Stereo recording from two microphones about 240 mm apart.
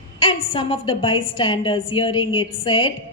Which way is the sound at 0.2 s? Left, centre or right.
Left.